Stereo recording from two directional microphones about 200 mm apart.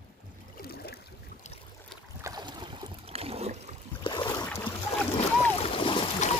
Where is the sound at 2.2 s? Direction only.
20° right (ahead or behind).